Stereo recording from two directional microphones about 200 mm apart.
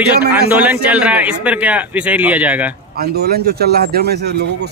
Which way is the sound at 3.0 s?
50° right (ahead or behind).